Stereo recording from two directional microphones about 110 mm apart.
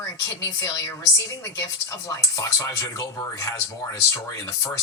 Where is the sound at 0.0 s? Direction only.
30° left (ahead or behind).